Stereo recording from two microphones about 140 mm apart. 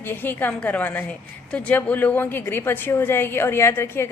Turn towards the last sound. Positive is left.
turn(degrees=15)  # may be behind; listen again after turning